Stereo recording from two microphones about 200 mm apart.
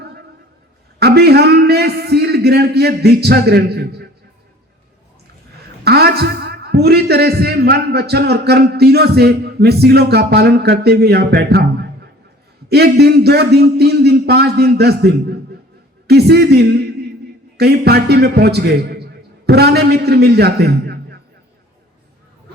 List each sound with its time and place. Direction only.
0.9 s a man's voice: 55° right (ahead or behind)
5.8 s a man's voice: 55° right (ahead or behind)